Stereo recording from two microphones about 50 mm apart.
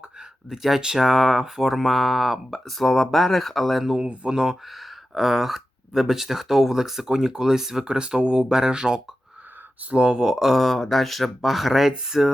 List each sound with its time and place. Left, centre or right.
0.5 s speech: centre
4.0 s speech: right
4.3 s speech: centre